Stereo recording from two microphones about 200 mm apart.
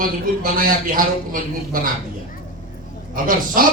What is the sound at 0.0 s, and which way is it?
A man's voice, 45° right (ahead or behind).